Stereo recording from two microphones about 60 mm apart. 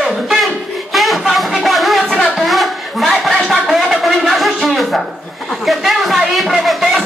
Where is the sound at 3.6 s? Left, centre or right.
Centre.